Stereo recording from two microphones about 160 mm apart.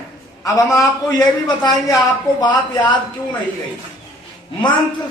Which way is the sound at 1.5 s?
25° left (ahead or behind).